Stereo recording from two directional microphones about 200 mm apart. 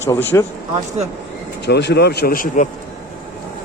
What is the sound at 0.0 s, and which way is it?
Speech, 10° left (ahead or behind).